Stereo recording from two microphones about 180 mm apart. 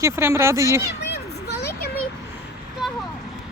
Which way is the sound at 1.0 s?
70° left (ahead or behind).